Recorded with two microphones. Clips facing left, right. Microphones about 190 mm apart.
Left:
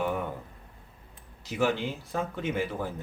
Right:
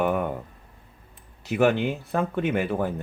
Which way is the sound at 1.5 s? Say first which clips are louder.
Right 6 dB; 60° right (ahead or behind).